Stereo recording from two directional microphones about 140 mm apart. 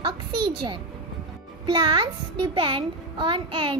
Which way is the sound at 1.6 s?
35° right (ahead or behind).